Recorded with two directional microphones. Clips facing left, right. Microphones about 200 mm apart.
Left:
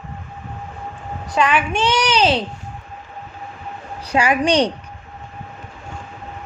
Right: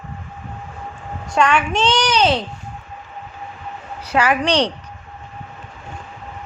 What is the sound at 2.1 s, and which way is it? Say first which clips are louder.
Speech: even; 30° left (ahead or behind).